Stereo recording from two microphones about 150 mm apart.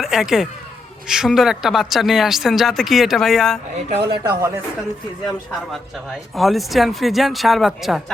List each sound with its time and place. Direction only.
0.0 s speech: 5° right (ahead or behind)
3.8 s speech: 40° right (ahead or behind)
4.2 s speech: 20° right (ahead or behind)
5.7 s speech: centre (ahead or behind)